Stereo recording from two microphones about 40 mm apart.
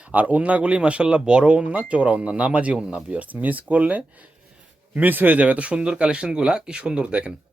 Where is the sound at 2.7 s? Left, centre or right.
Right.